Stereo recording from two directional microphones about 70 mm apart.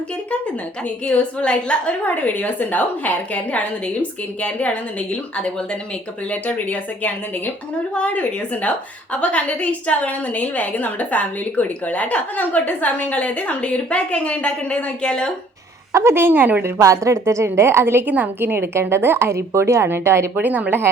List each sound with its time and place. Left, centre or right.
1.0 s a woman's voice: centre
15.9 s a woman's voice: right
16.8 s a woman's voice: right
18.1 s a woman's voice: right
20.3 s a woman's voice: right